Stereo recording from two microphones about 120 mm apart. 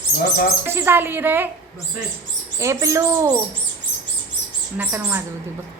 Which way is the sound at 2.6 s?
25° right (ahead or behind).